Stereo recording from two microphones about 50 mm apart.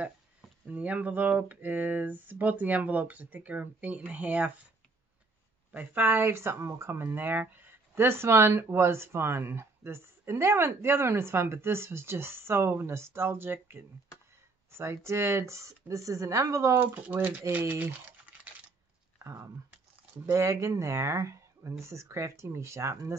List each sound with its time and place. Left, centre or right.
0.7 s speech: right
5.7 s speech: right
14.7 s speech: right
16.8 s speech: right
18.1 s typing: right
19.1 s speech: right